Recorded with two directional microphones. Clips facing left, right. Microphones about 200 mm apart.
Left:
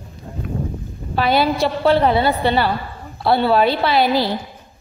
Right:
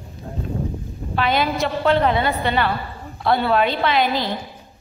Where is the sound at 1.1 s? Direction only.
35° left (ahead or behind).